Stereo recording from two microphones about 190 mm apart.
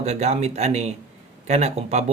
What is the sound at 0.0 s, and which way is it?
Speech, 35° right (ahead or behind).